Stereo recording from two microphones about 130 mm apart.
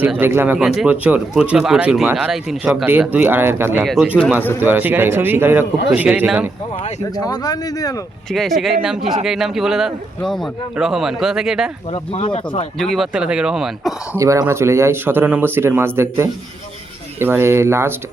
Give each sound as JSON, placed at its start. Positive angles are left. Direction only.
{"t": 0.2, "sound": "speech", "side_deg": -15}
{"t": 2.8, "sound": "speech", "side_deg": -15}
{"t": 3.8, "sound": "speech", "side_deg": 0}
{"t": 4.6, "sound": "speech", "side_deg": -15}
{"t": 7.3, "sound": "speech", "side_deg": 30}
{"t": 8.3, "sound": "speech", "side_deg": 0}
{"t": 11.9, "sound": "speech", "side_deg": 45}
{"t": 12.8, "sound": "speech", "side_deg": 0}
{"t": 14.2, "sound": "speech", "side_deg": -25}